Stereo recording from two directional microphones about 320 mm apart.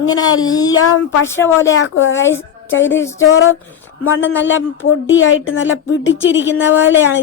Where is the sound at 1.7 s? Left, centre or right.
Left.